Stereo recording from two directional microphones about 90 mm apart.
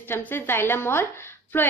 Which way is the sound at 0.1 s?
25° left (ahead or behind).